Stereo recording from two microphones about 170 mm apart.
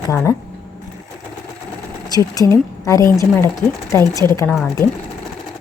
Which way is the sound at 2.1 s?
20° left (ahead or behind).